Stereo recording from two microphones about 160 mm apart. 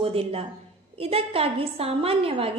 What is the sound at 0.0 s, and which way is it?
A woman's voice, 35° right (ahead or behind).